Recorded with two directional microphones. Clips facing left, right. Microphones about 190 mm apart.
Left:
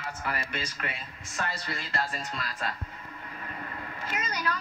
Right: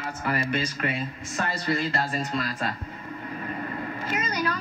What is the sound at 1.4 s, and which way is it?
Speech, 40° right (ahead or behind).